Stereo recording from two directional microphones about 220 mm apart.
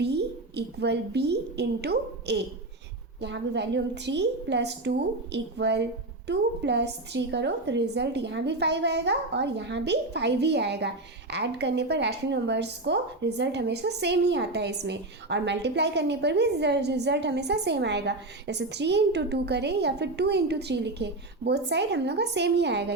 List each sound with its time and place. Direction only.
0.0 s a woman's voice: 50° right (ahead or behind)